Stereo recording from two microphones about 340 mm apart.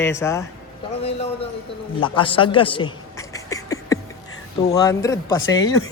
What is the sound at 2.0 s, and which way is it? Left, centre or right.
Speech, centre.